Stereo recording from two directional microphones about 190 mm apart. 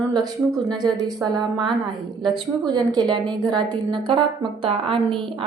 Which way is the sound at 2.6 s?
20° right (ahead or behind).